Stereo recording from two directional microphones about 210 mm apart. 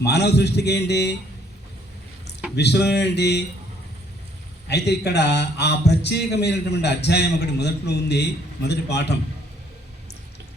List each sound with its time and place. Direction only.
0.0 s a man's voice: 50° left (ahead or behind)
2.6 s a man's voice: 50° left (ahead or behind)
4.7 s a man's voice: 50° left (ahead or behind)